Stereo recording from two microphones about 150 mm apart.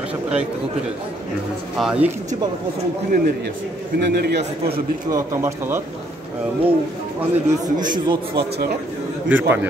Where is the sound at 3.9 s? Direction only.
90° right.